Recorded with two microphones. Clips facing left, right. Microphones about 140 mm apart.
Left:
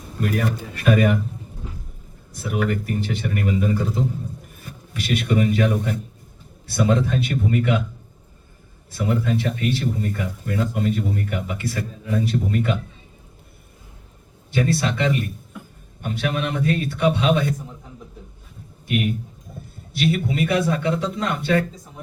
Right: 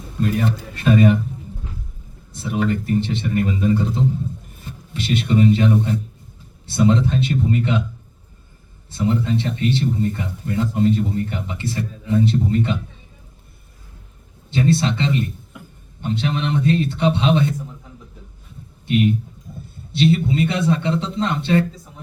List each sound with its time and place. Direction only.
0.2 s speech: 25° right (ahead or behind)
2.3 s speech: 25° right (ahead or behind)
8.9 s speech: 25° right (ahead or behind)
14.5 s speech: 25° right (ahead or behind)
19.9 s speech: 25° right (ahead or behind)